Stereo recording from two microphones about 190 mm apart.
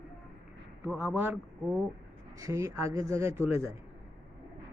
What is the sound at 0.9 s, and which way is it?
Speech, 5° right (ahead or behind).